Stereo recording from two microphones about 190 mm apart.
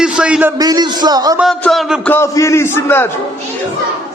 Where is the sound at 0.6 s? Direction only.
20° right (ahead or behind).